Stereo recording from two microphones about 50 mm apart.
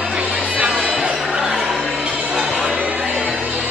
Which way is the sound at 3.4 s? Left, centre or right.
Right.